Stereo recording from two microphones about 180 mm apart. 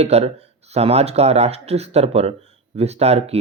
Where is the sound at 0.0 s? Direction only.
35° right (ahead or behind).